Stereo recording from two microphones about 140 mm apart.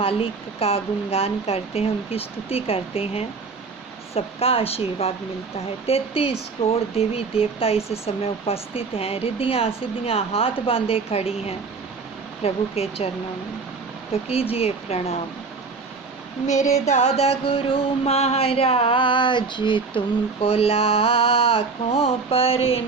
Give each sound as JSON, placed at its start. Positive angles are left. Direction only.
{"t": 0.0, "sound": "music", "side_deg": 40}
{"t": 14.1, "sound": "music", "side_deg": 45}
{"t": 16.7, "sound": "music", "side_deg": 50}